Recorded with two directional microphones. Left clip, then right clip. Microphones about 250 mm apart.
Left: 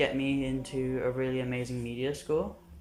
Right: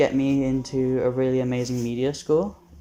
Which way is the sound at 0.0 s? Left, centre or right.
Centre.